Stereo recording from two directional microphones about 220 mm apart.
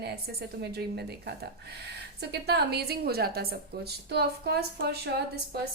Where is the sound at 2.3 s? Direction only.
45° right (ahead or behind).